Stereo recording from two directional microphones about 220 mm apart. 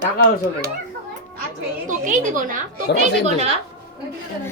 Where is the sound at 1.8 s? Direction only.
35° right (ahead or behind).